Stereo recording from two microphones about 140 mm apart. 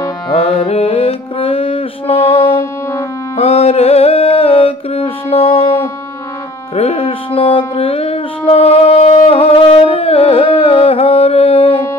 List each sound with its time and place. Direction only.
0.3 s music: 40° left (ahead or behind)
6.7 s music: 45° left (ahead or behind)